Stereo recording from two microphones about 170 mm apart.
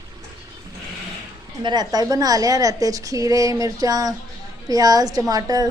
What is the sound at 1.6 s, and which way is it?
A woman's voice, 25° right (ahead or behind).